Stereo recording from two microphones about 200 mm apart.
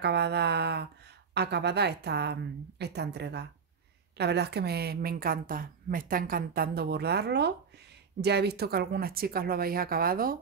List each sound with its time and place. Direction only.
0.0 s a woman's voice: 55° right (ahead or behind)